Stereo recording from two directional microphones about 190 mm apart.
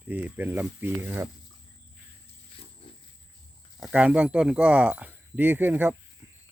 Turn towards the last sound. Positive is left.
turn(degrees=-10)  # may be behind; listen again after turning